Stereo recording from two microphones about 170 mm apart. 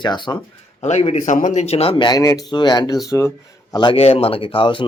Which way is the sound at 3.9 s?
35° left (ahead or behind).